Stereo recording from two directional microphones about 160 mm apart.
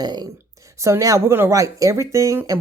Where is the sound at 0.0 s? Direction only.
25° right (ahead or behind).